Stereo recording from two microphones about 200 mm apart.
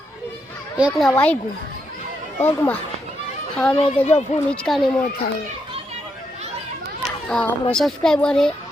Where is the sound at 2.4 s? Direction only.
10° left (ahead or behind).